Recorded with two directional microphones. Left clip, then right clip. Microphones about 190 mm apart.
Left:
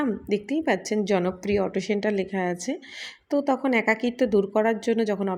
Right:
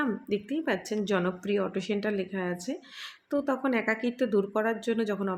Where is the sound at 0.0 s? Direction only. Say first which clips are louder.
Left 4 dB; 20° left (ahead or behind).